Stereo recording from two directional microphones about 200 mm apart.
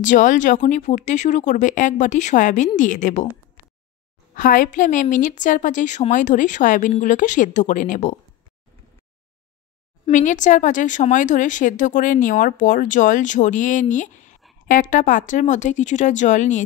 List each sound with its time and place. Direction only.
0.0 s a woman's voice: 40° left (ahead or behind)
4.4 s a woman's voice: 45° left (ahead or behind)
10.1 s a woman's voice: 40° left (ahead or behind)